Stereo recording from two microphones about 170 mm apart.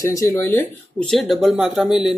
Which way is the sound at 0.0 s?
20° left (ahead or behind).